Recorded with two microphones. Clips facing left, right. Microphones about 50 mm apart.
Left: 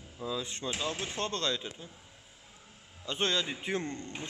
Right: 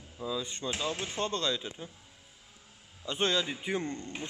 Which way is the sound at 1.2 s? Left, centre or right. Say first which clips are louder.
Right 2 dB; centre.